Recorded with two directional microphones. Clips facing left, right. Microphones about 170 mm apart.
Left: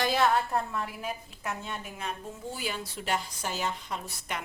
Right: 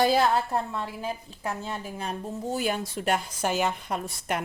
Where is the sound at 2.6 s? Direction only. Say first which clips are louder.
Right 8 dB; 50° right (ahead or behind).